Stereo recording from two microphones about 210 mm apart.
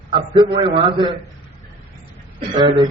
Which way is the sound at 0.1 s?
25° right (ahead or behind).